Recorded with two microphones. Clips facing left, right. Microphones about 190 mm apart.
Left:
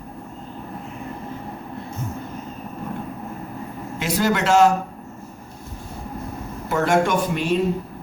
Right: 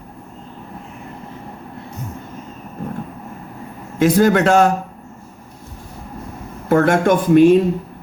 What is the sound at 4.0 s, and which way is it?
Speech, 50° right (ahead or behind).